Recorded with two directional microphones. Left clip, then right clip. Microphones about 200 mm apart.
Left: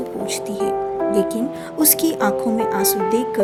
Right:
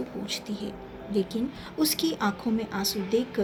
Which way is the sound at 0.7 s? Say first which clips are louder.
Left 19 dB; 90° left.